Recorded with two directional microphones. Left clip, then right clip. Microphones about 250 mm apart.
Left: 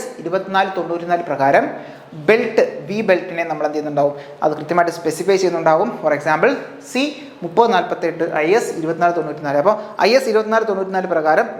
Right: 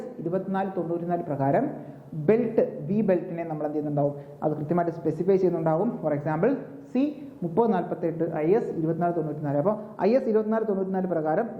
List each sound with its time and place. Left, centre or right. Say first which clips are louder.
0.3 s a man's voice: left 11 dB; centre
4.0 s a man's voice: left 10 dB; left
4.5 s speech: left 10 dB; centre